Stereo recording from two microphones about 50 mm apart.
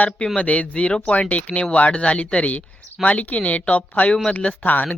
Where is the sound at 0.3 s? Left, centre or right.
Left.